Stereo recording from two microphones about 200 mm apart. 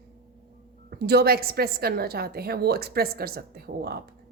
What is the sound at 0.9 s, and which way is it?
Speech, 55° right (ahead or behind).